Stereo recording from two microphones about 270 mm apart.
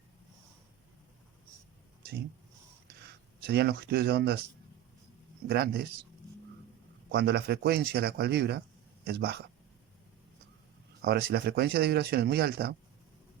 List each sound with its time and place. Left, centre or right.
2.8 s a sound: right
5.5 s speech: right
7.1 s speech: right
11.0 s speech: right